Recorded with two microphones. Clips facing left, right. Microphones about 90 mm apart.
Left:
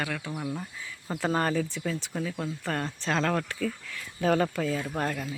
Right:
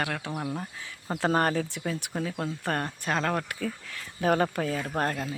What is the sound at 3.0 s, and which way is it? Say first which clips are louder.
Speech: left 3 dB; 15° right (ahead or behind).